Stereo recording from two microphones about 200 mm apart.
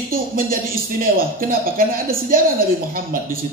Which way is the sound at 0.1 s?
45° right (ahead or behind).